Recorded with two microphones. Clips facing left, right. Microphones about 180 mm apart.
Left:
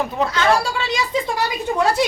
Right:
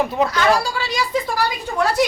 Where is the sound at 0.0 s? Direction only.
Centre (ahead or behind).